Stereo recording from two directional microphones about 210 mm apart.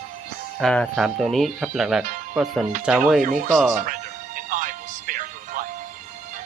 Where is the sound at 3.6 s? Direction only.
40° right (ahead or behind).